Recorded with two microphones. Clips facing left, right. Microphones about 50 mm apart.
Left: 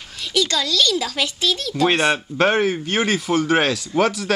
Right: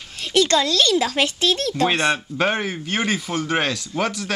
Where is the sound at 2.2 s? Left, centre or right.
Centre.